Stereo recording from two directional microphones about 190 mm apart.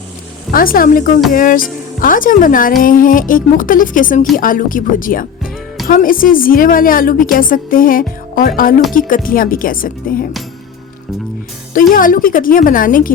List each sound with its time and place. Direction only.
0.5 s a woman's voice: 50° left (ahead or behind)
11.7 s a woman's voice: 45° left (ahead or behind)